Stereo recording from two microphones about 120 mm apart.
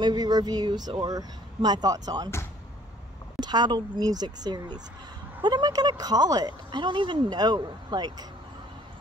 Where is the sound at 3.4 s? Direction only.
35° right (ahead or behind).